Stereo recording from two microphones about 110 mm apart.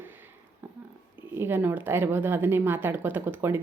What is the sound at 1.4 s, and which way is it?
A woman's voice, 20° right (ahead or behind).